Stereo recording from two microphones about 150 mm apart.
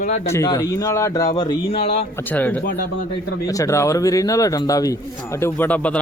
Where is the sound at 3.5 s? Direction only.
20° left (ahead or behind).